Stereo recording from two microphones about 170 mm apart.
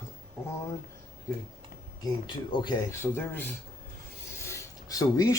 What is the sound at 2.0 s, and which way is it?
Speech, 25° left (ahead or behind).